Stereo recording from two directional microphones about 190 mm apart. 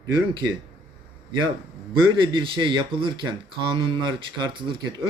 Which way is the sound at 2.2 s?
25° right (ahead or behind).